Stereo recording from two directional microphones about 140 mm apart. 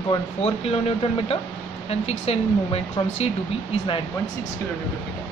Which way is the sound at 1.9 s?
45° left (ahead or behind).